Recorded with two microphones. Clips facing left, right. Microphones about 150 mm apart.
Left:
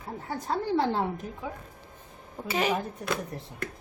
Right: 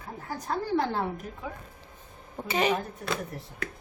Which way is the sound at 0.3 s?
20° left (ahead or behind).